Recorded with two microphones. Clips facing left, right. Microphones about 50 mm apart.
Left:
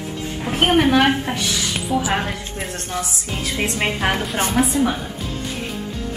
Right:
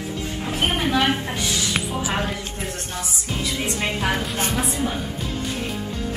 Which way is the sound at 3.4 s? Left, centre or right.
Left.